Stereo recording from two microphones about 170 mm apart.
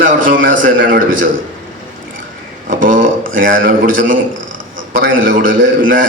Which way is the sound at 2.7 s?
50° right (ahead or behind).